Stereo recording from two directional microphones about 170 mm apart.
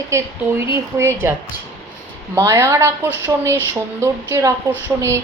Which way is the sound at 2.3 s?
15° right (ahead or behind).